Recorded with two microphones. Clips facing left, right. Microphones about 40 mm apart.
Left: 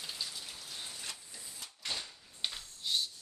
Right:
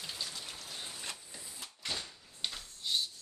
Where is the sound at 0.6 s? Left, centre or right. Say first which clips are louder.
Right 1 dB; centre.